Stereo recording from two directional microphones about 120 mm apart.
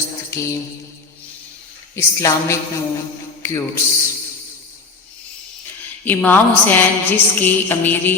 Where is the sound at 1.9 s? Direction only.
25° left (ahead or behind).